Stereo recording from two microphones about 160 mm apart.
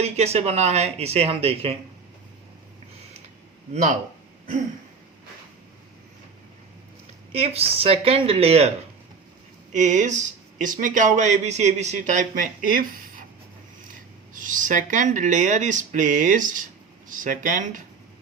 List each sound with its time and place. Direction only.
0.0 s speech: 40° right (ahead or behind)
3.7 s speech: 50° right (ahead or behind)
7.3 s speech: 40° right (ahead or behind)
9.7 s speech: 50° right (ahead or behind)
14.3 s speech: 55° right (ahead or behind)